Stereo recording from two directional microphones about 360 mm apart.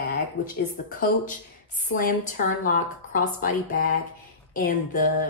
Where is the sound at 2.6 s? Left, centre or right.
Left.